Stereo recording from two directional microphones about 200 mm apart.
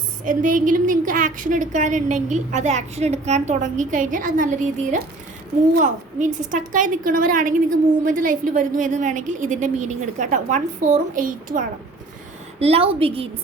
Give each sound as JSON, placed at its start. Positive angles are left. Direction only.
{"t": 0.3, "sound": "a woman's voice", "side_deg": -40}
{"t": 12.5, "sound": "a woman's voice", "side_deg": -30}